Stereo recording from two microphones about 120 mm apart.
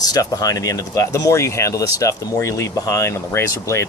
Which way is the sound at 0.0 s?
30° left (ahead or behind).